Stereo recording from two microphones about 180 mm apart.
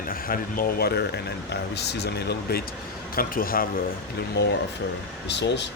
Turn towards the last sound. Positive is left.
turn(degrees=75)  # may be behind; listen again after turning